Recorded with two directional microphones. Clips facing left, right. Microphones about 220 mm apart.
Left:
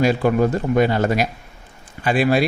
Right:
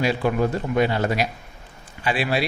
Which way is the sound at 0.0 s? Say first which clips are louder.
Left 5 dB; 45° left (ahead or behind).